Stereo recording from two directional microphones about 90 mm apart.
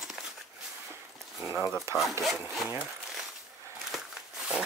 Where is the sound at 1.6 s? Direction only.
35° left (ahead or behind).